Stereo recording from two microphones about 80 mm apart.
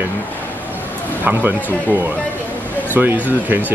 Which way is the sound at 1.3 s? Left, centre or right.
Right.